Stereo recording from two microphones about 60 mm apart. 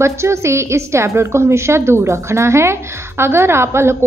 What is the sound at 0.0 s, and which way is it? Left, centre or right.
A woman's voice, right.